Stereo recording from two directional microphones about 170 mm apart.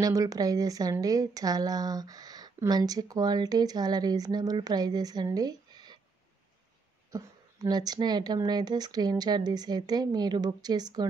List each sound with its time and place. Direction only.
0.0 s a woman's voice: 20° right (ahead or behind)
7.1 s a woman's voice: 20° right (ahead or behind)